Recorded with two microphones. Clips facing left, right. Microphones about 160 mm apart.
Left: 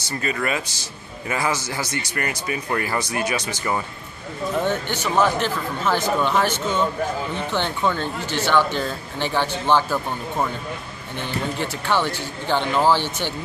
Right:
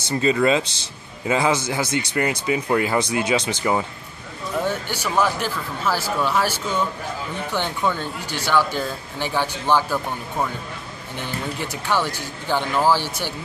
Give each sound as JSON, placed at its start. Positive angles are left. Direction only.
{"t": 0.1, "sound": "a man's voice", "side_deg": -20}
{"t": 11.1, "sound": "speech", "side_deg": -10}